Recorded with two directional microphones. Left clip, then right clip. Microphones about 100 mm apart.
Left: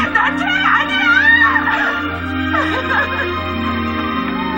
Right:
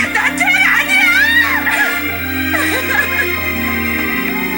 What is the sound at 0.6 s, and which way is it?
Music, 35° right (ahead or behind).